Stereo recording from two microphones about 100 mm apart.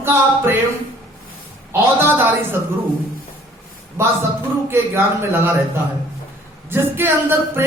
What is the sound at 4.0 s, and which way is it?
Speech, 25° right (ahead or behind).